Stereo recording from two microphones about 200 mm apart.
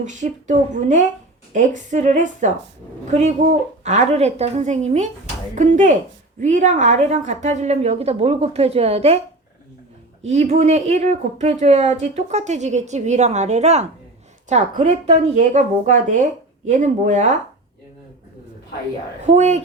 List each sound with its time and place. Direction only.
0.0 s speech: 35° right (ahead or behind)
10.2 s speech: 35° right (ahead or behind)
19.2 s speech: 35° right (ahead or behind)